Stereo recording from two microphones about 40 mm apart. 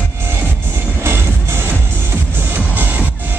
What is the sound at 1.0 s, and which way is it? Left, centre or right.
Music, right.